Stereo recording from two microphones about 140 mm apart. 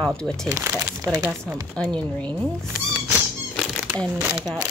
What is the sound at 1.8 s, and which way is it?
Speech, 5° left (ahead or behind).